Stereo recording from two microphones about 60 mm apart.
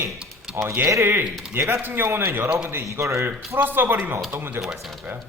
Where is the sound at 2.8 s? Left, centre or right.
Right.